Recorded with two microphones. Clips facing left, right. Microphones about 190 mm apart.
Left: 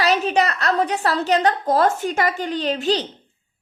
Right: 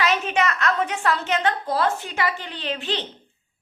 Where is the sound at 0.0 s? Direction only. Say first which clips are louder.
Left 4 dB; 35° left (ahead or behind).